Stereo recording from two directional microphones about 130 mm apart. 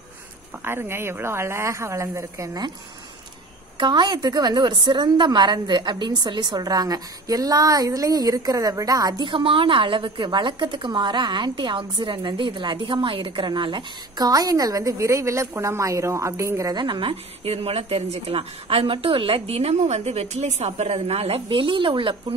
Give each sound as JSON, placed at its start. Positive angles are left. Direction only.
{"t": 0.7, "sound": "speech", "side_deg": -20}
{"t": 3.7, "sound": "a woman's voice", "side_deg": -35}
{"t": 9.3, "sound": "a woman's voice", "side_deg": -40}
{"t": 16.7, "sound": "a woman's voice", "side_deg": -35}